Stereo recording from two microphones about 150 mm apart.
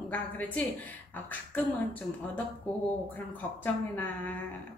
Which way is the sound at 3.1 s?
10° left (ahead or behind).